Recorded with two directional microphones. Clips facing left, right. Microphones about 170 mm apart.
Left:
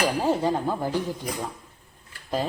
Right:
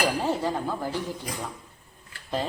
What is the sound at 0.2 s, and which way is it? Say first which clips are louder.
Speech: left 3 dB; 15° left (ahead or behind).